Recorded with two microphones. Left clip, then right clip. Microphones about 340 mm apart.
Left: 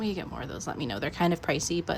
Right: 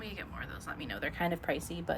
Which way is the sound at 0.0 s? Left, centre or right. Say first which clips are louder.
Left 8 dB; centre.